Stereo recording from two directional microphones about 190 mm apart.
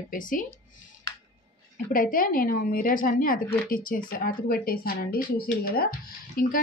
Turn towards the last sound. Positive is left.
turn(degrees=50)  # may be behind; listen again after turning